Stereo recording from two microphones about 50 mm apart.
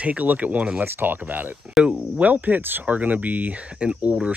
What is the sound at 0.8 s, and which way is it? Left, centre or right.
Speech, right.